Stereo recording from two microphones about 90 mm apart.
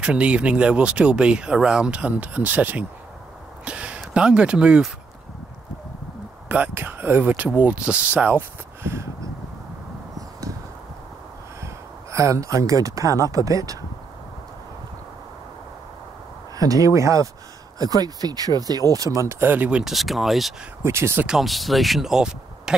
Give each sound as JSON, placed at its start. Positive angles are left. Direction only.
{"t": 0.0, "sound": "speech", "side_deg": -15}
{"t": 6.5, "sound": "speech", "side_deg": -20}
{"t": 11.6, "sound": "speech", "side_deg": -35}
{"t": 16.5, "sound": "speech", "side_deg": -40}
{"t": 19.4, "sound": "speech", "side_deg": -20}
{"t": 19.8, "sound": "speech", "side_deg": 0}
{"t": 20.8, "sound": "speech", "side_deg": -30}
{"t": 21.3, "sound": "speech", "side_deg": 0}